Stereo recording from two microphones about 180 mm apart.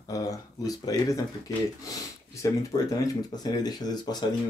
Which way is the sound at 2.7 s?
20° left (ahead or behind).